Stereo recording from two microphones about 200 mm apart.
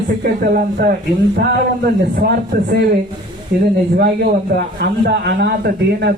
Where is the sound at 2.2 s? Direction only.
50° right (ahead or behind).